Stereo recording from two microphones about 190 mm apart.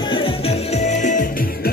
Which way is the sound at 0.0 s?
25° left (ahead or behind).